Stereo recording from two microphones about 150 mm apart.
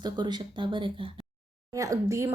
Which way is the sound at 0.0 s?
30° right (ahead or behind).